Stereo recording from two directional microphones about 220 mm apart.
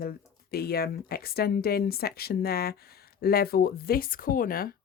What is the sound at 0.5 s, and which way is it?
Speech, 45° left (ahead or behind).